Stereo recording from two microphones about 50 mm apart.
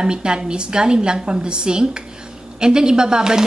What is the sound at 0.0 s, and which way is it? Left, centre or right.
Speech, centre.